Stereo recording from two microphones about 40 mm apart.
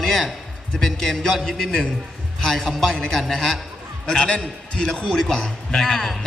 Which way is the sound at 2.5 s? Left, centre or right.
Centre.